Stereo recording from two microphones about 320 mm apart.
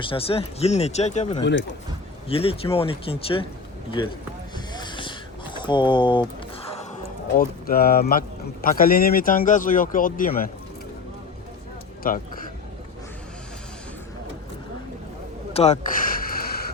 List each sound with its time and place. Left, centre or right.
0.0 s speech: centre
4.5 s vehicle: centre
5.5 s a sound: centre
7.3 s speech: left
12.0 s speech: left
15.5 s a sound: left